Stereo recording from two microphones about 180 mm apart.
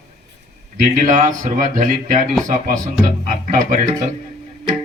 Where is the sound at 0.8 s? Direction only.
45° right (ahead or behind).